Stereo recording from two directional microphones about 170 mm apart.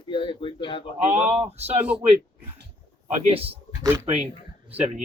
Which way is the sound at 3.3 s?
35° right (ahead or behind).